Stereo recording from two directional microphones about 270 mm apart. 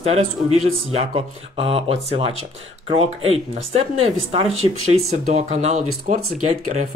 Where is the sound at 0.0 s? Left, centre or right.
Right.